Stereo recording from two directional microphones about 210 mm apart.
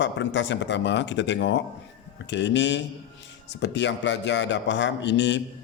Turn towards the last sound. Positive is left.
turn(degrees=60)  # may be behind; listen again after turning